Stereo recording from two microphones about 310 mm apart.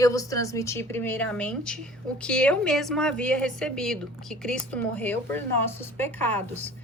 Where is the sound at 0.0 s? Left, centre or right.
Centre.